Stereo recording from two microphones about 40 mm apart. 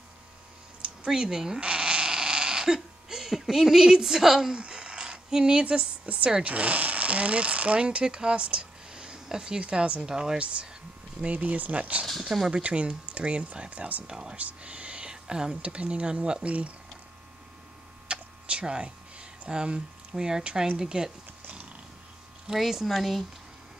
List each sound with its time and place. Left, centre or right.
1.0 s speech: centre
1.6 s a sound: right; by 4.5 s centre
4.5 s speech: right
10.0 s speech: centre
11.1 s speech: right
14.0 s speech: centre
14.3 s speech: right
15.6 s speech: right
18.0 s a sound: right
20.7 s speech: centre
22.5 s speech: centre